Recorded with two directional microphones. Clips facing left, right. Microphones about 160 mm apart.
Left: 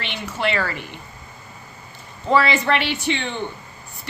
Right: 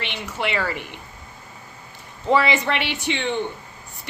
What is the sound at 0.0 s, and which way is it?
Speech, 15° right (ahead or behind).